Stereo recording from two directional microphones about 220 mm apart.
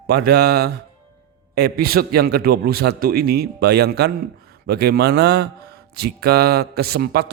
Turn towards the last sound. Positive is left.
turn(degrees=-45)  # may be behind; listen again after turning